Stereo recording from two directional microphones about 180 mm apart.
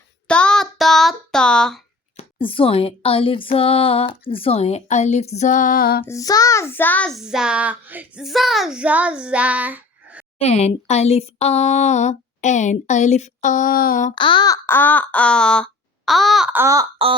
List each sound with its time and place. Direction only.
0.3 s child singing: 5° left (ahead or behind)
2.1 s speech: 30° left (ahead or behind); by 6.1 s 55° left (ahead or behind)
6.1 s child singing: 20° left (ahead or behind); by 10.2 s 10° right (ahead or behind)
10.3 s speech: 35° left (ahead or behind); by 14.1 s 50° left (ahead or behind)
14.2 s child singing: 25° left (ahead or behind); by 16.8 s 15° right (ahead or behind)